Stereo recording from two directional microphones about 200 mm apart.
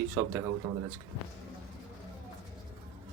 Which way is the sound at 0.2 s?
10° right (ahead or behind).